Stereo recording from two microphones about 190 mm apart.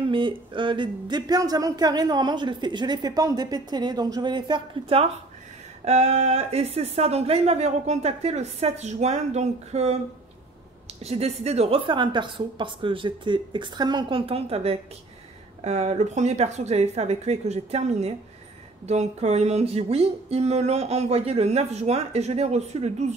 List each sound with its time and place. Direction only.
0.1 s speech: 25° right (ahead or behind)
11.0 s speech: 35° right (ahead or behind)